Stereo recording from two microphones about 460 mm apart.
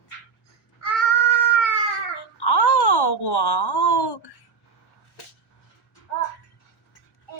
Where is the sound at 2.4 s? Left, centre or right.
Left.